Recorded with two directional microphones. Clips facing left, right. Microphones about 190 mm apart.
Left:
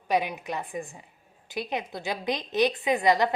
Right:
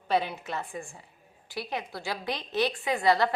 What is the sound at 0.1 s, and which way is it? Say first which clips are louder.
A woman's voice: left 1 dB; 15° left (ahead or behind).